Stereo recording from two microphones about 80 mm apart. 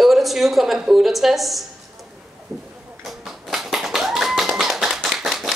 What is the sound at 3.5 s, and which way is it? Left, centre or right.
Tap, centre.